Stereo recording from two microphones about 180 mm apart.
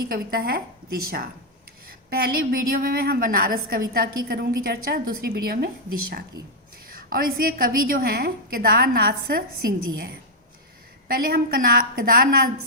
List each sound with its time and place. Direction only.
0.1 s a woman's voice: 55° right (ahead or behind)
11.1 s a woman's voice: 55° right (ahead or behind)